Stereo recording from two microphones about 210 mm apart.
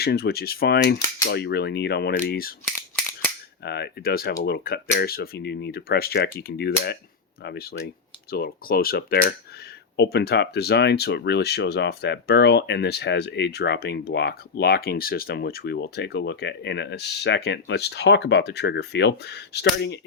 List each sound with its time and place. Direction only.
0.0 s speech: 50° left (ahead or behind)
3.6 s speech: 50° left (ahead or behind)